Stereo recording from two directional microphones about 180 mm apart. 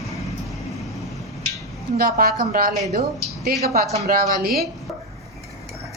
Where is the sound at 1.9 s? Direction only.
55° right (ahead or behind).